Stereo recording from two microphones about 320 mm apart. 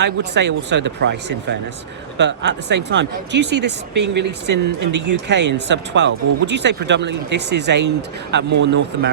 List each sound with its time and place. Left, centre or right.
0.0 s speech: right